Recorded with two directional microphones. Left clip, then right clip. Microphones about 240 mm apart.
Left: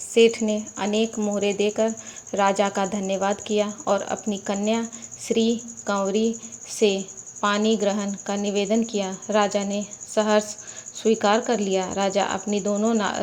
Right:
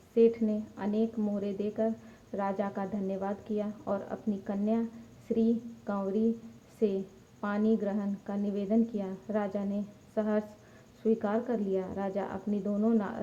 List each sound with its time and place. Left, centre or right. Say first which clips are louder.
0.1 s speech: left 8 dB; left
7.4 s speech: left 10 dB; centre